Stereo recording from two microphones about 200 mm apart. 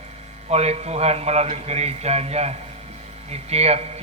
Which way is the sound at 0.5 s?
30° right (ahead or behind).